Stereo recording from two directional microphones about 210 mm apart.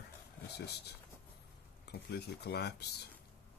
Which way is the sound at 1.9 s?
50° left (ahead or behind).